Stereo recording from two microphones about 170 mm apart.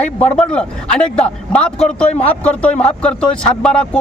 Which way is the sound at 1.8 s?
40° left (ahead or behind).